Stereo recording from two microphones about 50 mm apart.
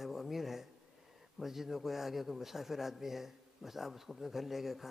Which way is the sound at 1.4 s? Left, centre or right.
Centre.